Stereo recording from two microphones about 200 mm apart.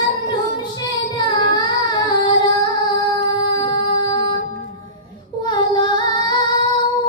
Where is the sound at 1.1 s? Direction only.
20° left (ahead or behind).